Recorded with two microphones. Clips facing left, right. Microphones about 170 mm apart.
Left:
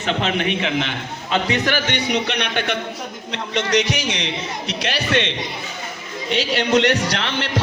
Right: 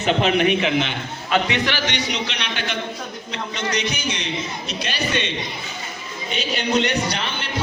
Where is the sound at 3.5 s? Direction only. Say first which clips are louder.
Left 6 dB; 80° left.